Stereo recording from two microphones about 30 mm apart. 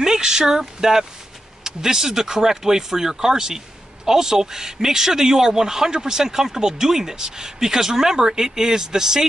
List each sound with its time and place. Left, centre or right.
0.0 s speech: centre